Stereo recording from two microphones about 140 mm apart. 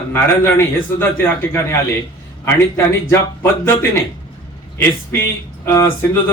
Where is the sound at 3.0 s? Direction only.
20° left (ahead or behind).